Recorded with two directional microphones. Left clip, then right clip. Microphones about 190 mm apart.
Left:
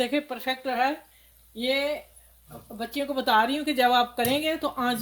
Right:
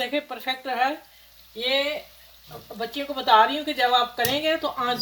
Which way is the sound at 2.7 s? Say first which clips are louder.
Even; 80° left.